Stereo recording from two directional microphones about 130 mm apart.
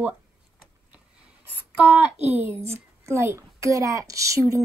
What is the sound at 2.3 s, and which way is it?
A woman's voice, 15° right (ahead or behind).